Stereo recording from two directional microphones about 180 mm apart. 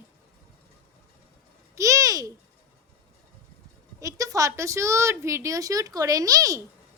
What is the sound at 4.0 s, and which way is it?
A woman's voice, 20° right (ahead or behind).